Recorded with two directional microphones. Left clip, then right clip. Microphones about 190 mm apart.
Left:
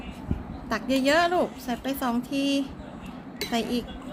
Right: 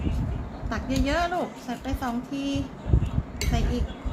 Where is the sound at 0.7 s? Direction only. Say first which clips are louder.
Left 5 dB; 55° left (ahead or behind).